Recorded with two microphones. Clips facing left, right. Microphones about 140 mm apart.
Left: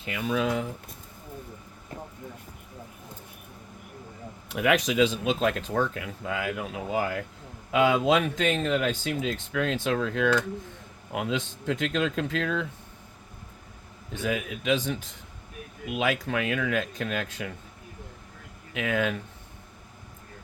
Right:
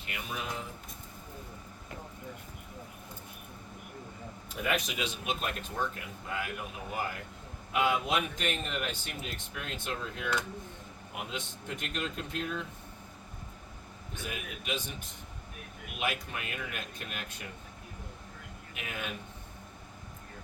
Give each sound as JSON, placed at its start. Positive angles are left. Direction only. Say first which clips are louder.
{"t": 0.2, "sound": "speech", "louder": "left 12 dB", "side_deg": 85}
{"t": 4.4, "sound": "speech", "louder": "left 9 dB", "side_deg": 90}
{"t": 14.2, "sound": "speech", "louder": "left 11 dB", "side_deg": 90}
{"t": 18.7, "sound": "speech", "louder": "left 13 dB", "side_deg": 90}